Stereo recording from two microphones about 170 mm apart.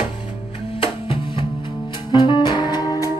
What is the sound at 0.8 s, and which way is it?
Music, 30° left (ahead or behind).